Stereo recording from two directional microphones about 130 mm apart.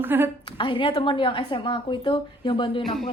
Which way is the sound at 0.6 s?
40° left (ahead or behind).